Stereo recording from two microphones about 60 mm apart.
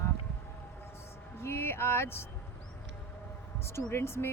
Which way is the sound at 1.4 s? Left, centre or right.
Left.